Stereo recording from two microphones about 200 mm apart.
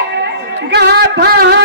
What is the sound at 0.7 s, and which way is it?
Music, 55° right (ahead or behind).